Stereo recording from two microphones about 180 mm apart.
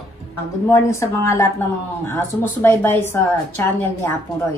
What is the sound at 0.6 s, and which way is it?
A woman's voice, 15° left (ahead or behind).